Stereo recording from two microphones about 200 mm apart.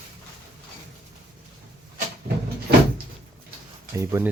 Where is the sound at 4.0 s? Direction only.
15° right (ahead or behind).